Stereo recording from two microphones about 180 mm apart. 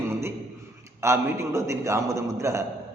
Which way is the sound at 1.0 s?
15° right (ahead or behind).